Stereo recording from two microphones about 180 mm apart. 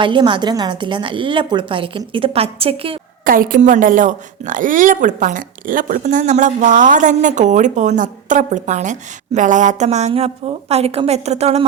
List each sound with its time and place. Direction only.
0.0 s a woman's voice: 25° right (ahead or behind)
3.2 s a woman's voice: 50° right (ahead or behind)